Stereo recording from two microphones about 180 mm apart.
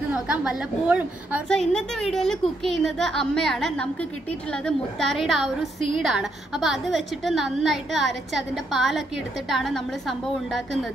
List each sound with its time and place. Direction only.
0.1 s a woman's voice: 5° right (ahead or behind)
1.5 s a woman's voice: 5° left (ahead or behind)